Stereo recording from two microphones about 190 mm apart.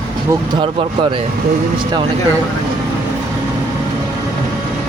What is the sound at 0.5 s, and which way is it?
Speech, 25° right (ahead or behind).